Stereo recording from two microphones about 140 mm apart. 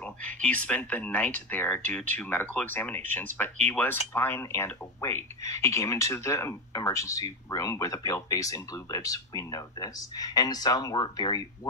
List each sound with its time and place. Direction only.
0.0 s speech: 10° left (ahead or behind); by 11.4 s 30° left (ahead or behind)